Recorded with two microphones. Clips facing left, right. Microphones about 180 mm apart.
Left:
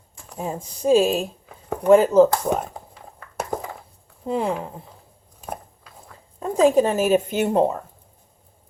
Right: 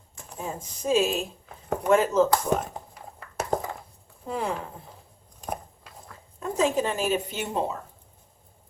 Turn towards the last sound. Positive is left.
turn(degrees=55)  # may be behind; listen again after turning